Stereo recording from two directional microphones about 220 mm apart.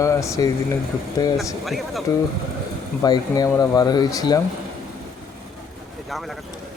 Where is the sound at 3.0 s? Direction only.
15° left (ahead or behind).